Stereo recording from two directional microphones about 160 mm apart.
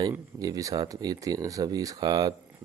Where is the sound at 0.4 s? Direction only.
20° right (ahead or behind).